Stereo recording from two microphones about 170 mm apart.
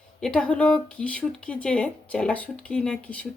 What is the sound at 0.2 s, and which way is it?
Speech, 5° left (ahead or behind).